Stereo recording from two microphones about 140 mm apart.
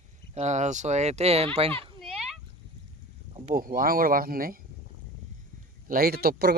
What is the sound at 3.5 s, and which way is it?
Speech, 90° right.